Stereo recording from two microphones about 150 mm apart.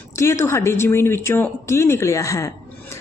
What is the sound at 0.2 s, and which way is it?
A woman's voice, 20° left (ahead or behind).